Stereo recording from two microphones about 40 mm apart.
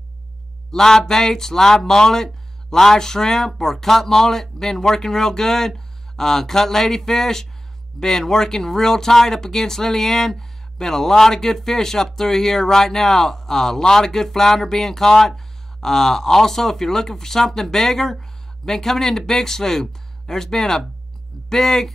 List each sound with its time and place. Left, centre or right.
0.7 s speech: centre